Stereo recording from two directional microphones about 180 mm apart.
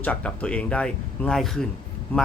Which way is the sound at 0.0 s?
10° left (ahead or behind).